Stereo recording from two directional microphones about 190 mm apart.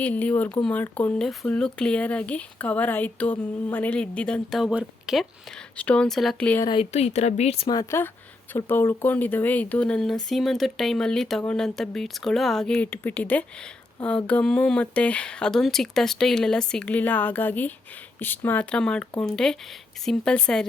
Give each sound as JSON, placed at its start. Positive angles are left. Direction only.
{"t": 0.0, "sound": "speech", "side_deg": 10}
{"t": 6.7, "sound": "speech", "side_deg": 30}